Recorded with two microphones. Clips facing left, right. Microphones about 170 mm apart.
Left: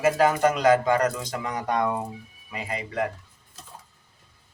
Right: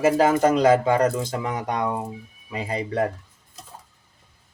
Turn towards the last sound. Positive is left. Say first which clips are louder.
# right 4 dB
turn(degrees=-35)  # may be behind; listen again after turning